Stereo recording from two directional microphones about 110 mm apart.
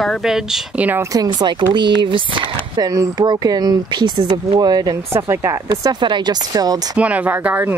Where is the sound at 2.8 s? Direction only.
35° right (ahead or behind).